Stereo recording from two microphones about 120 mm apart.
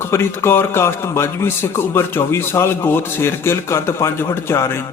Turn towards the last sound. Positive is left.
turn(degrees=20)  # may be behind; listen again after turning